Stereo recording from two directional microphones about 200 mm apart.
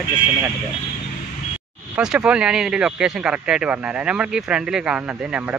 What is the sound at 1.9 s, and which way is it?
Speech, 5° right (ahead or behind).